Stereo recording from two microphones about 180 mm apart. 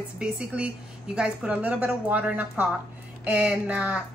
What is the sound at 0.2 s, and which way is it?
Speech, 5° right (ahead or behind).